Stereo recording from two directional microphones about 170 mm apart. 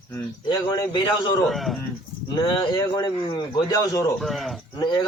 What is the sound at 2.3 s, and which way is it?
Speech, 25° left (ahead or behind).